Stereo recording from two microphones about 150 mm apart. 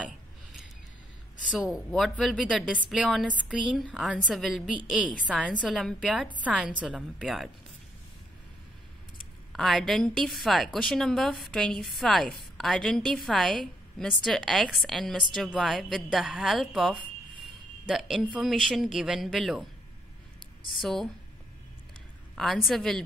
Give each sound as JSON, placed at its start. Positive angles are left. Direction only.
{"t": 1.5, "sound": "a woman's voice", "side_deg": -5}
{"t": 9.5, "sound": "a woman's voice", "side_deg": 0}
{"t": 20.7, "sound": "a woman's voice", "side_deg": 0}
{"t": 22.3, "sound": "a woman's voice", "side_deg": 0}